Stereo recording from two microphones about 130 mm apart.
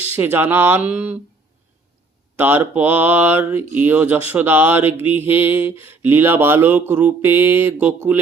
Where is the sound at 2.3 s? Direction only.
15° right (ahead or behind).